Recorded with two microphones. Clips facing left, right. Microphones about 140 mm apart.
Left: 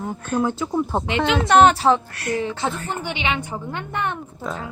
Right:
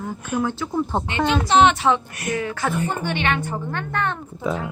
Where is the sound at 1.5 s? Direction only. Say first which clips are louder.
Left 3 dB; 40° left (ahead or behind).